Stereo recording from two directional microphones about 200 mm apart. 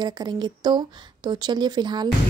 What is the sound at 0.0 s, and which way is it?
A woman's voice, 20° right (ahead or behind).